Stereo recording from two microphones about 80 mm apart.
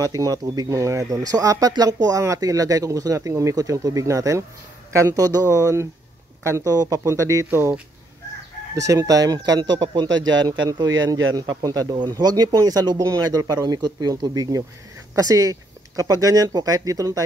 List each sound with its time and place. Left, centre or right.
0.0 s speech: right
8.8 s speech: right